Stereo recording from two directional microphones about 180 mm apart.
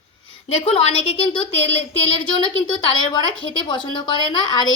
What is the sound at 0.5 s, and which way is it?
Speech, 35° left (ahead or behind).